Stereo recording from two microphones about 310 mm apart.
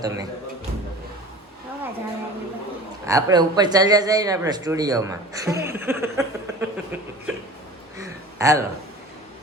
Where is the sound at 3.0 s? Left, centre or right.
Centre.